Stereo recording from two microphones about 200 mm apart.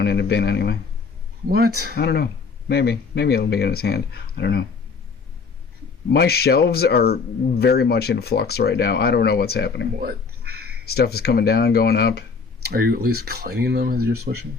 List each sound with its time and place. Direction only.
0.0 s speech: 55° left (ahead or behind)
1.5 s speech: 50° right (ahead or behind)
2.0 s speech: 55° left (ahead or behind)
6.1 s speech: 50° left (ahead or behind)
10.0 s a sound: 50° right (ahead or behind)
10.8 s speech: 50° left (ahead or behind)
12.6 s speech: 50° right (ahead or behind)